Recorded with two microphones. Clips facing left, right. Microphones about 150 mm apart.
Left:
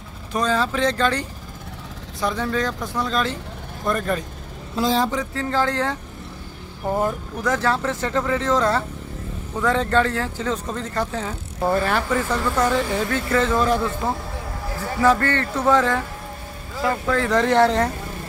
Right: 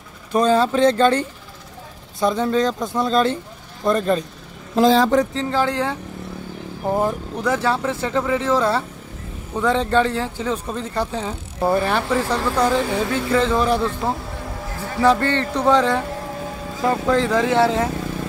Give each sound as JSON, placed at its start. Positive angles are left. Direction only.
{"t": 0.3, "sound": "speech", "side_deg": -30}
{"t": 5.3, "sound": "speech", "side_deg": -20}
{"t": 17.3, "sound": "speech", "side_deg": -10}